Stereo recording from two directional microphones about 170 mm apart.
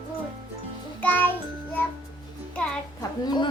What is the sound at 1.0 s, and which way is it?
Music, 10° left (ahead or behind).